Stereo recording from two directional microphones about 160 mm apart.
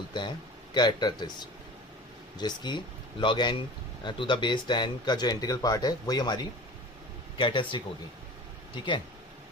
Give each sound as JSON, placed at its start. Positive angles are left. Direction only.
{"t": 0.1, "sound": "a man's voice", "side_deg": 30}